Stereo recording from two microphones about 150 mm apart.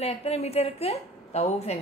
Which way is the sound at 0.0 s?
45° left (ahead or behind).